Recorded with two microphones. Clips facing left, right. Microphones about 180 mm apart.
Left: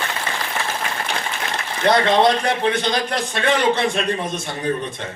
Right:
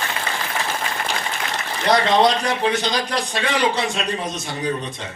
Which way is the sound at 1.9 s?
55° left (ahead or behind).